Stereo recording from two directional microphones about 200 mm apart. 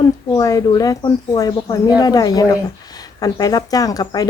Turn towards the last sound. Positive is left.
turn(degrees=20)  # may be behind; listen again after turning